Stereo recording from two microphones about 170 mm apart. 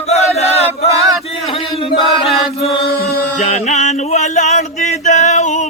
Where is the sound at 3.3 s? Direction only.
45° left (ahead or behind).